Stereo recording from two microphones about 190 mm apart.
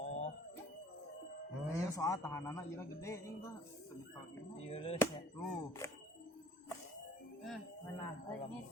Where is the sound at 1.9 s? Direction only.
15° left (ahead or behind).